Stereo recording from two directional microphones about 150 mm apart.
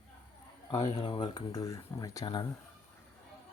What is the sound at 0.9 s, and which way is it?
Speech, 35° left (ahead or behind).